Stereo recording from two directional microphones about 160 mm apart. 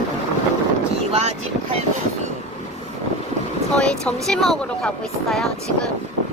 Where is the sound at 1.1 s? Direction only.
40° right (ahead or behind).